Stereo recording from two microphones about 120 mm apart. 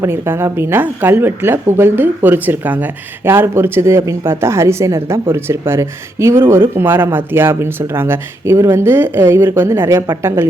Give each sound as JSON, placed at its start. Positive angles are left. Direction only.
{"t": 0.0, "sound": "a woman's voice", "side_deg": -20}